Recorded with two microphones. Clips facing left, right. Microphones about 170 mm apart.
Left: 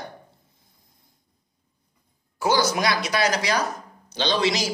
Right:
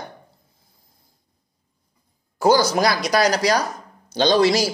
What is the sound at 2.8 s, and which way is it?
Speech, 40° right (ahead or behind).